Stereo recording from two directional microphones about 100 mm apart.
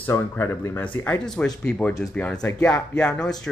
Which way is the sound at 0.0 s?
20° left (ahead or behind).